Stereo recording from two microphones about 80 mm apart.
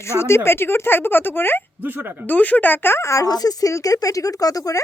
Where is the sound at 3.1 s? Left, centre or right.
Left.